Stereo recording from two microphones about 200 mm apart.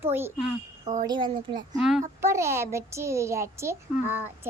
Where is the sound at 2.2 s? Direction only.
15° right (ahead or behind).